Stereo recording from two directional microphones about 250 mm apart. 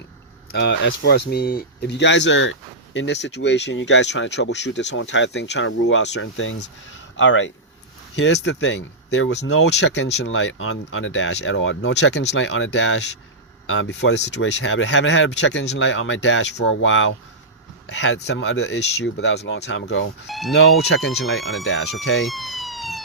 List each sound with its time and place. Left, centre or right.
0.5 s speech: left
20.2 s speech: centre
21.6 s speech: left
22.3 s police car: centre